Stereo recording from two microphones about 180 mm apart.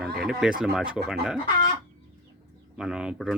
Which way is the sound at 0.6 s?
5° right (ahead or behind).